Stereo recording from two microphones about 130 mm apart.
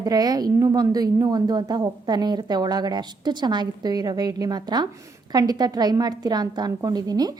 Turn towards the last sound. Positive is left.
turn(degrees=-30)  # may be behind; listen again after turning